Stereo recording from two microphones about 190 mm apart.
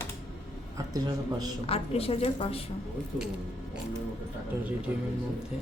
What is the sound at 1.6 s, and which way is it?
A woman's voice, 30° left (ahead or behind).